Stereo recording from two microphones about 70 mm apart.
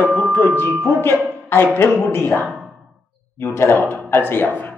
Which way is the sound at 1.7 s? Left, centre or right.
Left.